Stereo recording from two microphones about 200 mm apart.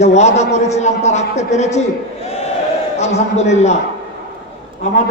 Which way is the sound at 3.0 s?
35° left (ahead or behind).